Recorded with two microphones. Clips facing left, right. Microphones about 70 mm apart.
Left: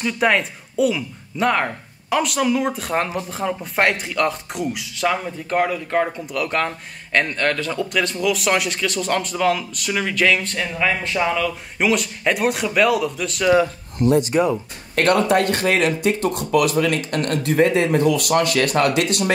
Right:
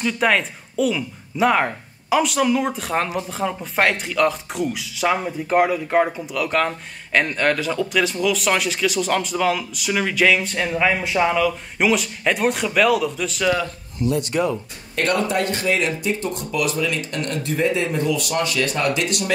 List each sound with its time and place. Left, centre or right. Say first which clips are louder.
0.0 s speech: left 1 dB; centre
5.0 s speech: right 1 dB; centre
13.9 s speech: left 5 dB; left
14.2 s speech: left 3 dB; centre
15.0 s speech: left 4 dB; left
19.0 s speech: left 3 dB; left